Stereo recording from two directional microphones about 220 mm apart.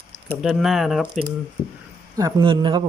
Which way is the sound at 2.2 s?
20° right (ahead or behind).